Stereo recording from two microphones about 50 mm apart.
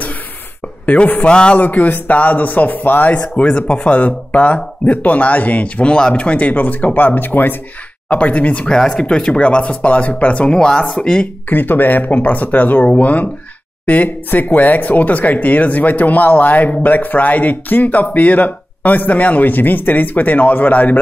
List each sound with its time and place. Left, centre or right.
0.8 s speech: left
1.6 s speech: left
8.1 s speech: left
8.6 s speech: centre
11.4 s speech: left